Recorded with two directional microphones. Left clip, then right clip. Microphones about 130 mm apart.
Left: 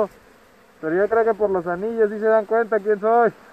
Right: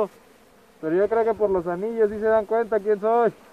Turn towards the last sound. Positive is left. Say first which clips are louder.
# left 3 dB
turn(degrees=-15)  # may be behind; listen again after turning